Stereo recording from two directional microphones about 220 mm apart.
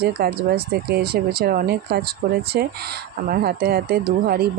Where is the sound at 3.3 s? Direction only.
40° right (ahead or behind).